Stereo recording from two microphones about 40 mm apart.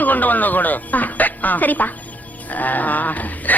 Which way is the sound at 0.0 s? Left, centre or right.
Left.